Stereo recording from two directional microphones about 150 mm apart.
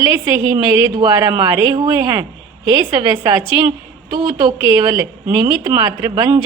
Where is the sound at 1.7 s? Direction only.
25° right (ahead or behind).